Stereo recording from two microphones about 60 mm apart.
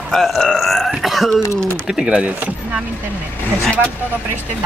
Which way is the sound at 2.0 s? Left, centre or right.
Centre.